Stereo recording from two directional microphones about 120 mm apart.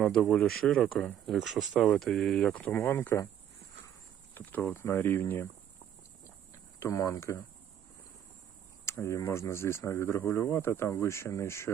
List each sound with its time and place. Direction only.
0.0 s speech: 5° left (ahead or behind)
4.4 s speech: 15° left (ahead or behind)
6.7 s speech: 25° left (ahead or behind)
8.9 s speech: 25° left (ahead or behind)